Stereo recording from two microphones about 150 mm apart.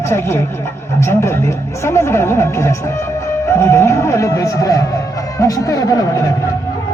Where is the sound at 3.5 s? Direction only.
20° left (ahead or behind).